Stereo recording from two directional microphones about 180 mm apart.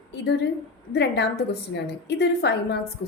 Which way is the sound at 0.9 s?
65° left (ahead or behind).